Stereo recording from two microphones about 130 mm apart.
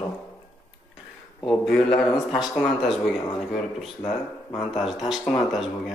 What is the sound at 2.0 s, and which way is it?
Speech, centre (ahead or behind).